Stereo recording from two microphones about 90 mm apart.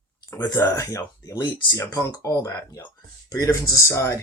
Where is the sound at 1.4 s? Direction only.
65° left (ahead or behind).